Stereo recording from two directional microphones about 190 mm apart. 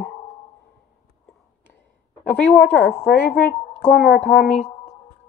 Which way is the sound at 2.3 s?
10° left (ahead or behind).